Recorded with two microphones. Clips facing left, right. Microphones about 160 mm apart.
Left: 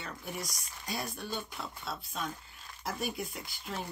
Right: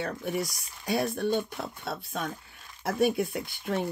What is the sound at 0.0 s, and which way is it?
Speech, 65° right (ahead or behind).